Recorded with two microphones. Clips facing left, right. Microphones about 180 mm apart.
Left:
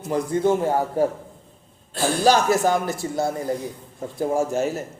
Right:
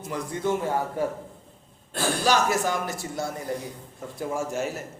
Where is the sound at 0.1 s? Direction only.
30° left (ahead or behind).